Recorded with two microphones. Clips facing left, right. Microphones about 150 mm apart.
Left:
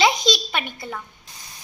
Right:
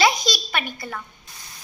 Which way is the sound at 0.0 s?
20° left (ahead or behind).